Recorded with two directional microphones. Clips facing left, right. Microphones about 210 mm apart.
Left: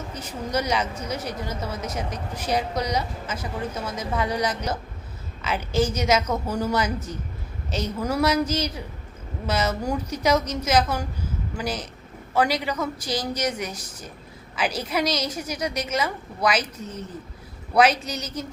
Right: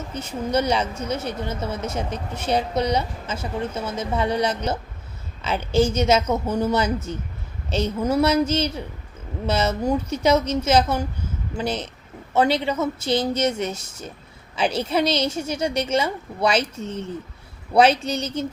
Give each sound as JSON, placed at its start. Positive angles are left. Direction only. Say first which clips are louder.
{"t": 0.1, "sound": "speech", "louder": "right 5 dB", "side_deg": -25}